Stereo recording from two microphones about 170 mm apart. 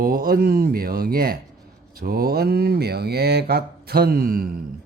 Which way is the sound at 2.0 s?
60° right (ahead or behind).